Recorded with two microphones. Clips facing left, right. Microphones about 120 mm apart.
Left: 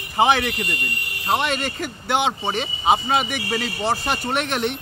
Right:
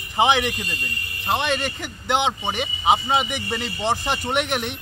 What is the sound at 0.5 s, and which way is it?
Speech, 70° left (ahead or behind).